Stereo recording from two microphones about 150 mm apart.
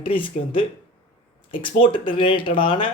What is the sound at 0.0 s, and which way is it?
Speech, 35° left (ahead or behind).